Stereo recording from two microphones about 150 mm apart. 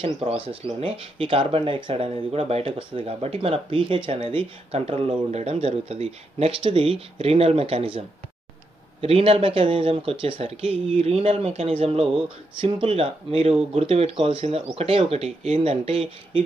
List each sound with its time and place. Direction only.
0.0 s speech: 35° right (ahead or behind)
9.0 s speech: 40° right (ahead or behind)